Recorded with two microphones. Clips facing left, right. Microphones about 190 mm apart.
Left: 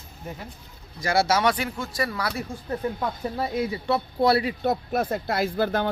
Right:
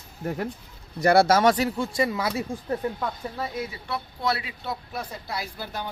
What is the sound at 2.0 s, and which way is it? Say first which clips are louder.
Speech: right 2 dB; 20° right (ahead or behind).